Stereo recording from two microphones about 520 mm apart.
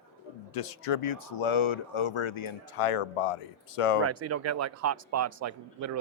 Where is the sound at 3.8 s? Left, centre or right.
Left.